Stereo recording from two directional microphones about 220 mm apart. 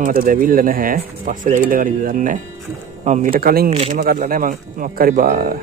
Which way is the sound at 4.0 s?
40° right (ahead or behind).